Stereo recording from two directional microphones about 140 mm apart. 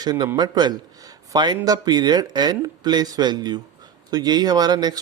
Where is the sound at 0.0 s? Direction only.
30° right (ahead or behind).